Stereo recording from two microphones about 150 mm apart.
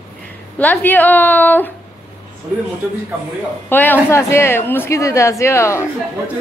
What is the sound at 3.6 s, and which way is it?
A woman's voice, 15° left (ahead or behind).